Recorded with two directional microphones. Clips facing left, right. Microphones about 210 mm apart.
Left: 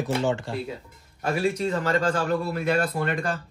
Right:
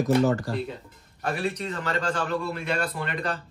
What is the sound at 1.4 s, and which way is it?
Speech, 45° left (ahead or behind).